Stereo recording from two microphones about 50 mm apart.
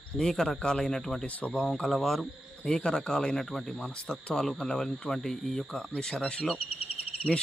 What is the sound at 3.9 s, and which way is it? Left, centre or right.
Speech, centre.